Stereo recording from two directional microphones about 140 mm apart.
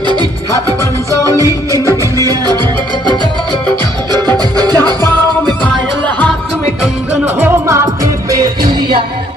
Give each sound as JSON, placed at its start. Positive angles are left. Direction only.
{"t": 0.0, "sound": "music", "side_deg": -30}
{"t": 4.4, "sound": "music", "side_deg": -30}
{"t": 5.6, "sound": "music", "side_deg": 10}
{"t": 7.1, "sound": "music", "side_deg": -15}